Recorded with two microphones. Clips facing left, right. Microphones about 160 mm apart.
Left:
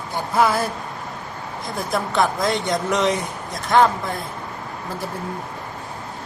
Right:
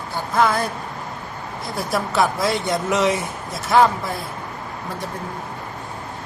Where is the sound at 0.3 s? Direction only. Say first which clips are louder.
Even; 10° left (ahead or behind).